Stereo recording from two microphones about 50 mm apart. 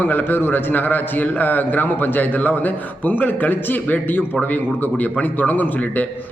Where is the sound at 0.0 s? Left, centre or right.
Left.